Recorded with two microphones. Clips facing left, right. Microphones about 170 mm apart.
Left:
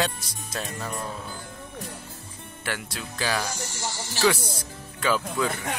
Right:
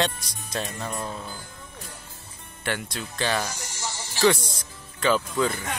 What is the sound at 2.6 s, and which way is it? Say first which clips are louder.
Speech: right 3 dB; 5° left (ahead or behind).